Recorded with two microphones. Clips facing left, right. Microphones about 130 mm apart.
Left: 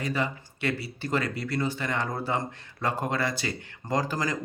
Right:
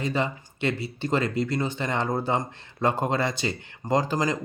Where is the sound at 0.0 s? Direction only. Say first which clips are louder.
Right 3 dB; 25° right (ahead or behind).